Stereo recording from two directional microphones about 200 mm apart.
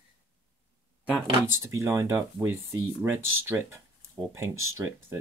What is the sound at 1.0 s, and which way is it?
Speech, centre (ahead or behind).